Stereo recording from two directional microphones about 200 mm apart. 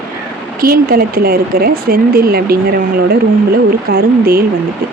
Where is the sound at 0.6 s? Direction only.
50° right (ahead or behind).